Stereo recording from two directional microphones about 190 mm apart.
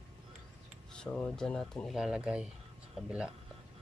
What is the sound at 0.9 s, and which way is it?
Speech, 5° left (ahead or behind).